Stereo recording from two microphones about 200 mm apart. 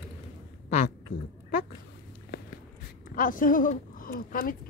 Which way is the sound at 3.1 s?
40° left (ahead or behind).